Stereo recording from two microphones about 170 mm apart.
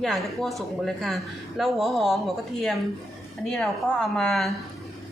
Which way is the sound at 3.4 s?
5° left (ahead or behind).